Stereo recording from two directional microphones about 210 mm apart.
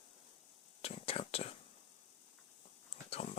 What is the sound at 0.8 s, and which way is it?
Whispering, 25° left (ahead or behind).